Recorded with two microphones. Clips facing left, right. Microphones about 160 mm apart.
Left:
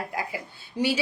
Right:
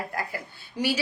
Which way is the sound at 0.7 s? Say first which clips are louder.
Left 2 dB; 25° left (ahead or behind).